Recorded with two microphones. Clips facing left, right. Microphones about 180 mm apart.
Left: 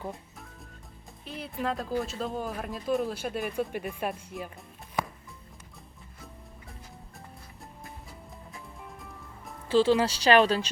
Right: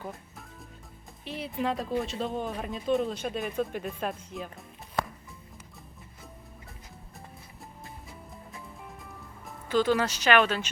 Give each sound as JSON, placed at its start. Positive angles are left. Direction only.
{"t": 1.2, "sound": "speech", "side_deg": 0}
{"t": 8.3, "sound": "music", "side_deg": 0}
{"t": 9.6, "sound": "speech", "side_deg": 30}